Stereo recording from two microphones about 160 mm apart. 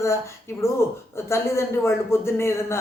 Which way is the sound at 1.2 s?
15° left (ahead or behind).